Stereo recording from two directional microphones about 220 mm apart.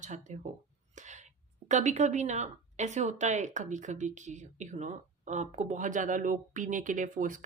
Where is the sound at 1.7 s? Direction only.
35° right (ahead or behind).